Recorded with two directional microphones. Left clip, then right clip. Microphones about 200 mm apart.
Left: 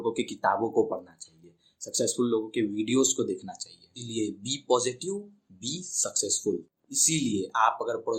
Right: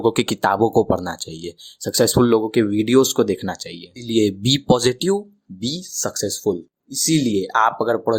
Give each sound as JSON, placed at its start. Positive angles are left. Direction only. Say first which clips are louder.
{"t": 0.0, "sound": "speech", "louder": "right 9 dB", "side_deg": -45}
{"t": 6.0, "sound": "speech", "louder": "right 5 dB", "side_deg": -35}